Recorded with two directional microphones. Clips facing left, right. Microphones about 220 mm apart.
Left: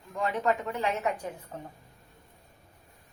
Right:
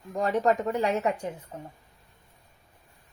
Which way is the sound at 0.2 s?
40° right (ahead or behind).